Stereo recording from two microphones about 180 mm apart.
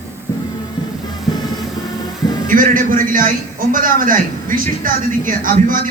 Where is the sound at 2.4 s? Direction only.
50° right (ahead or behind).